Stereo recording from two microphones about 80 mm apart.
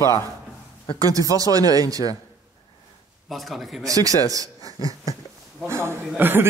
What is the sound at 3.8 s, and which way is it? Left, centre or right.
Speech, right.